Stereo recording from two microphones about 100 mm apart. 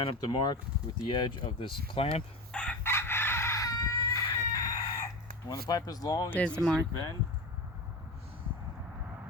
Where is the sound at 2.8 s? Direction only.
25° left (ahead or behind).